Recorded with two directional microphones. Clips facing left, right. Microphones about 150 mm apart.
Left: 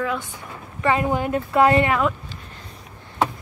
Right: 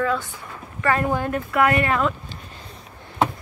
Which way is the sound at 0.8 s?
15° left (ahead or behind).